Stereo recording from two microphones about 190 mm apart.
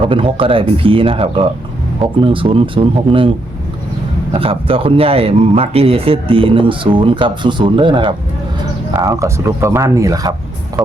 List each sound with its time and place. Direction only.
0.0 s speech: 30° right (ahead or behind)
10.8 s speech: 5° right (ahead or behind)